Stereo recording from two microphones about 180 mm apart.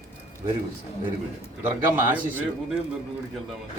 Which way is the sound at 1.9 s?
10° right (ahead or behind).